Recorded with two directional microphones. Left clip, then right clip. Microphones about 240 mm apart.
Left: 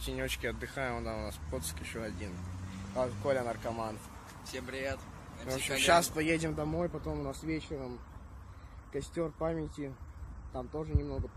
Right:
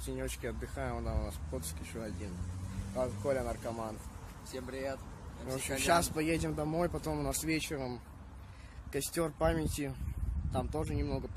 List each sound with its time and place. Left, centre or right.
0.0 s speech: centre
4.5 s speech: right
5.9 s speech: centre
8.9 s speech: centre